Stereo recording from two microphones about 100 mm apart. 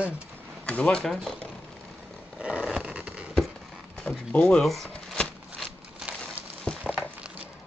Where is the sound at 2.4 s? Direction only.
10° right (ahead or behind).